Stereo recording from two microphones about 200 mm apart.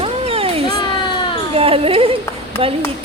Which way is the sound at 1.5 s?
30° right (ahead or behind).